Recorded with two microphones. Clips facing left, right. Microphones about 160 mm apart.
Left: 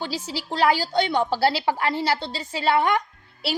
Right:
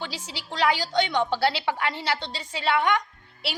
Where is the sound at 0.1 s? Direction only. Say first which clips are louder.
Left 8 dB; 5° left (ahead or behind).